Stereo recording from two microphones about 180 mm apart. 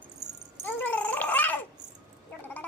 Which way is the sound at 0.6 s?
10° left (ahead or behind).